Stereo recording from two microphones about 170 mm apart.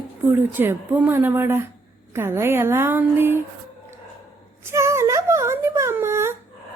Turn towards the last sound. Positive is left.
turn(degrees=-15)  # may be behind; listen again after turning